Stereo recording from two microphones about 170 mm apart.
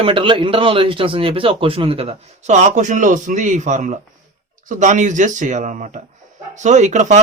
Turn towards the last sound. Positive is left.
turn(degrees=-45)  # may be behind; listen again after turning